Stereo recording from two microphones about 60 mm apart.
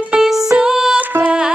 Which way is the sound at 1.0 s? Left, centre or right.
Right.